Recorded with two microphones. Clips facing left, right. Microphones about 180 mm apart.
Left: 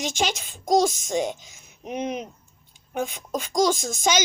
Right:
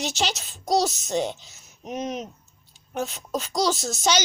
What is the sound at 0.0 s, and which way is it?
A child's voice, 50° left (ahead or behind).